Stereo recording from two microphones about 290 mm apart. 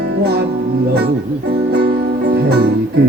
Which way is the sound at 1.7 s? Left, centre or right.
Right.